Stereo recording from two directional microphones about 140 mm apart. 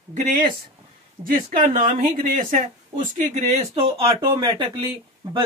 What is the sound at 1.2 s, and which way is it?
Speech, 80° right.